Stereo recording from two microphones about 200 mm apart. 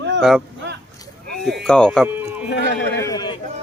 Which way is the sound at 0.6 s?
60° right (ahead or behind).